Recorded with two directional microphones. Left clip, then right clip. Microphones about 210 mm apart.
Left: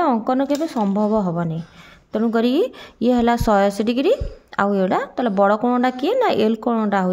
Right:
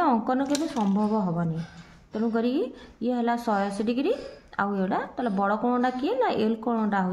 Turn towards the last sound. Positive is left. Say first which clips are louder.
# left 7 dB
turn(degrees=45)  # may be behind; listen again after turning